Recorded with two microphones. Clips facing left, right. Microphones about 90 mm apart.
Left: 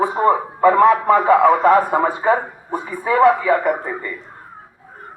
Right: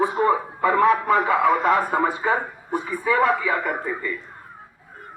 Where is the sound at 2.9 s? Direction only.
45° left (ahead or behind).